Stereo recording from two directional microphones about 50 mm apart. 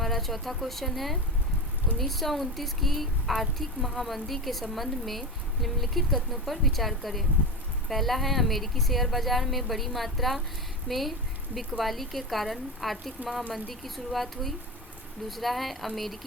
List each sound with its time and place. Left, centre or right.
0.0 s a woman's voice: centre